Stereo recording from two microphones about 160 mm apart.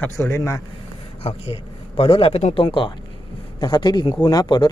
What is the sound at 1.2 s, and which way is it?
Speech, 40° left (ahead or behind).